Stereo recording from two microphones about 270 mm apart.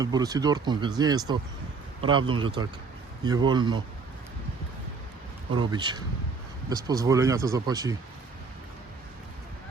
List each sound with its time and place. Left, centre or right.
0.0 s speech: centre
5.5 s speech: centre